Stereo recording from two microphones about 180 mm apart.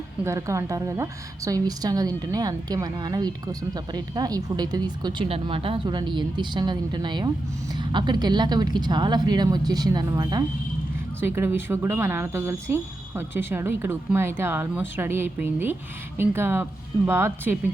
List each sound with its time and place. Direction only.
0.3 s a woman's voice: 15° right (ahead or behind)